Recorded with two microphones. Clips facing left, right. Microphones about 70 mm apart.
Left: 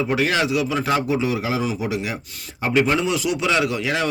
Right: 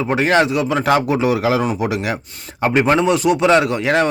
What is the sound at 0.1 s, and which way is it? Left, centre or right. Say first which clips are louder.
Speech: right 9 dB; right.